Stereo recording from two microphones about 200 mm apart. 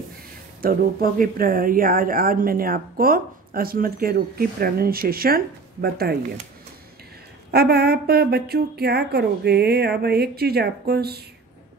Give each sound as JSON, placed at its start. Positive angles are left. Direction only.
{"t": 0.6, "sound": "speech", "side_deg": -45}
{"t": 7.5, "sound": "speech", "side_deg": -50}